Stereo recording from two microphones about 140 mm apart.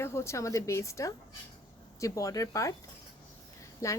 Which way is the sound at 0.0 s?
20° left (ahead or behind).